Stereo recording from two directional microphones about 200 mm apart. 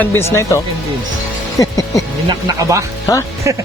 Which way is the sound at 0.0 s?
10° left (ahead or behind).